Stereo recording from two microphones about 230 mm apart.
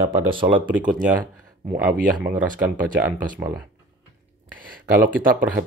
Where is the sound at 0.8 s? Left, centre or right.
Right.